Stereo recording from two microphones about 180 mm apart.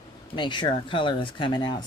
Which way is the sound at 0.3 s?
25° left (ahead or behind).